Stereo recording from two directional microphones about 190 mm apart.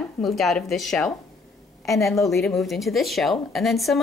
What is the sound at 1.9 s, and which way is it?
Speech, 15° left (ahead or behind).